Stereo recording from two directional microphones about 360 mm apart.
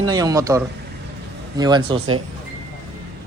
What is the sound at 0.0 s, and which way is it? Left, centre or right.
Speech, centre.